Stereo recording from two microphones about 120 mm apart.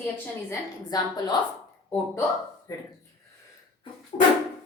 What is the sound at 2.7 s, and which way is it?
Speech, 30° left (ahead or behind).